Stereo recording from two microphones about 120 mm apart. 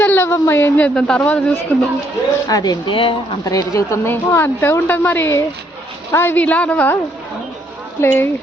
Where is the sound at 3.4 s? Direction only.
30° left (ahead or behind); by 6.9 s 10° left (ahead or behind).